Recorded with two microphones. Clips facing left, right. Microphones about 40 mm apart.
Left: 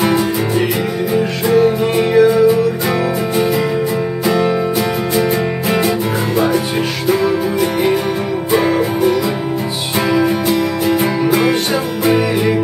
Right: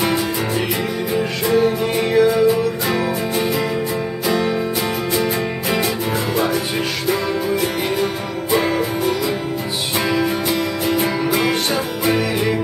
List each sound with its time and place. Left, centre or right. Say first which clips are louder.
0.0 s music: left 5 dB; centre
7.6 s music: left 5 dB; centre